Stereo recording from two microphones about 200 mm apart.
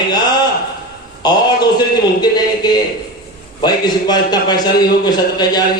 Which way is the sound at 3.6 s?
20° left (ahead or behind).